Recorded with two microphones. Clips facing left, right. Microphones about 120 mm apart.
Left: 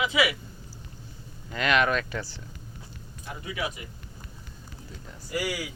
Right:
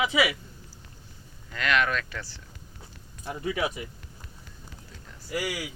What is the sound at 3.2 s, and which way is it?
Speech, 35° right (ahead or behind).